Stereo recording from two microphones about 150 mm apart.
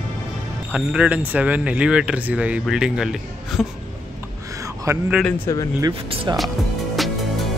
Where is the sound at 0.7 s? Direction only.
10° right (ahead or behind).